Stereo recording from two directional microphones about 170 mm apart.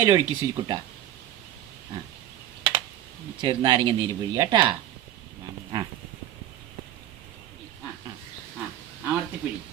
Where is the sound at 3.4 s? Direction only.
30° right (ahead or behind).